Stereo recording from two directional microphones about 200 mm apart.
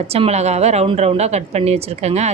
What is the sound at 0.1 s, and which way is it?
Speech, 30° right (ahead or behind).